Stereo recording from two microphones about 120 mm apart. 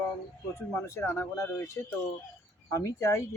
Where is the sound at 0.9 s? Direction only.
20° left (ahead or behind).